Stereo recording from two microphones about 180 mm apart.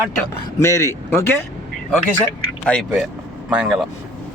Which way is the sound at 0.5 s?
15° left (ahead or behind).